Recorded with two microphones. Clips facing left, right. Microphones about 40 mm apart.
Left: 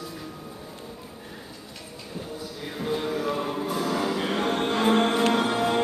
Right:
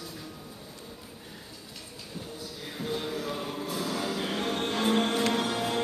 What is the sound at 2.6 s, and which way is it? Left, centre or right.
Music, centre.